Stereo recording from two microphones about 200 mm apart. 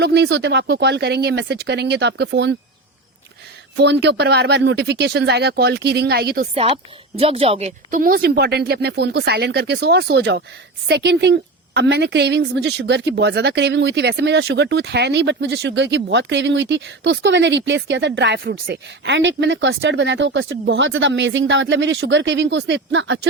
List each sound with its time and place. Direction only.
0.0 s a woman's voice: 55° right (ahead or behind)
3.8 s a woman's voice: 60° right (ahead or behind)
6.5 s a woman's voice: 30° right (ahead or behind); by 23.3 s 60° right (ahead or behind)